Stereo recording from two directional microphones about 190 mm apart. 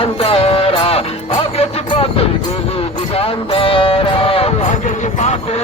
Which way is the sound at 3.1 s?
30° left (ahead or behind).